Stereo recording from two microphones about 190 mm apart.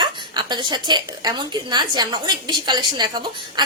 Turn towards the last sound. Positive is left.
turn(degrees=-25)  # may be behind; listen again after turning